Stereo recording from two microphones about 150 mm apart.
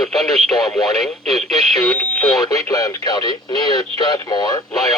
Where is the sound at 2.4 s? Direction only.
25° left (ahead or behind).